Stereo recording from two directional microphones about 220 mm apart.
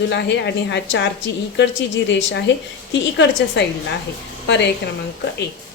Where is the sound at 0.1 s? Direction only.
50° left (ahead or behind).